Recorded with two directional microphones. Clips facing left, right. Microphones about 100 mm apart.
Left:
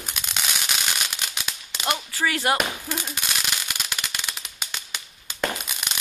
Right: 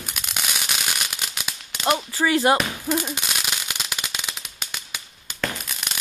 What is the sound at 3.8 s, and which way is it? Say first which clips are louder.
Firecracker: right 1 dB; 10° right (ahead or behind).